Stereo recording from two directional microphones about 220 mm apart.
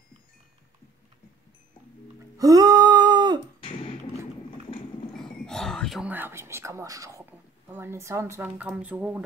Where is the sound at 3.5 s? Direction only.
25° left (ahead or behind).